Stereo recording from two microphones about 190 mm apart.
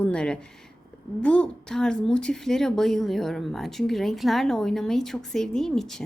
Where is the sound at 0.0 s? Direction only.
5° left (ahead or behind).